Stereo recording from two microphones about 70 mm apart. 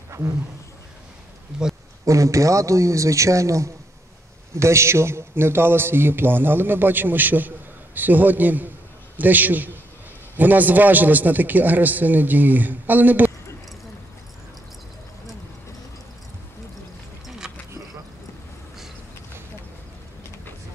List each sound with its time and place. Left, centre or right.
1.5 s speech: centre
2.0 s a man's voice: right
17.4 s a sound: centre